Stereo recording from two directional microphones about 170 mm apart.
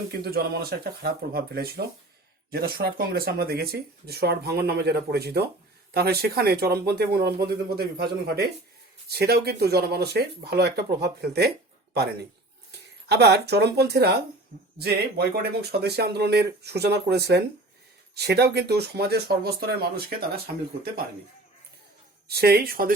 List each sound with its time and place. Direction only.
0.2 s speech: 65° right (ahead or behind)
13.1 s speech: 75° right (ahead or behind)
22.3 s speech: 70° right (ahead or behind)